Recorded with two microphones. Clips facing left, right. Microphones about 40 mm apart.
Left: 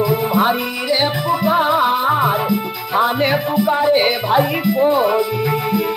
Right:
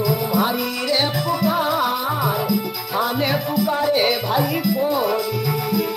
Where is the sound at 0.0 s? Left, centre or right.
Left.